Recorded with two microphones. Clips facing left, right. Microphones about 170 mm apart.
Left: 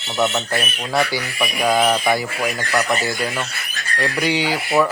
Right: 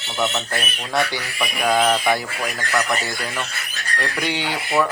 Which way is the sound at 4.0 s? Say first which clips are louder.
Left 5 dB; centre (ahead or behind).